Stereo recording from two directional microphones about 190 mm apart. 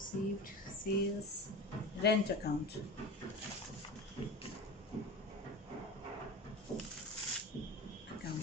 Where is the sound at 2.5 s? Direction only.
60° left (ahead or behind).